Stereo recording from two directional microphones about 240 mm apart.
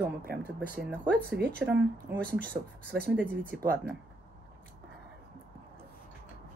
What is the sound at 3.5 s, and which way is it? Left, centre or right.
Speech, right.